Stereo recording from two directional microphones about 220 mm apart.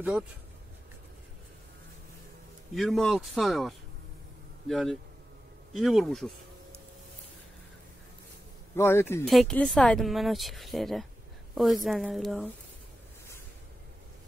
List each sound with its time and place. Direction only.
2.7 s speech: centre (ahead or behind)
8.7 s a man's voice: 10° left (ahead or behind)
9.2 s speech: centre (ahead or behind)